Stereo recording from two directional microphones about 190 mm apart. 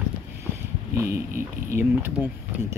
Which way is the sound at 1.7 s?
10° right (ahead or behind).